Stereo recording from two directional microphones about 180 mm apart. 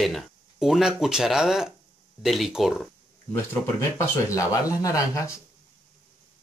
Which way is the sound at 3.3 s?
10° left (ahead or behind).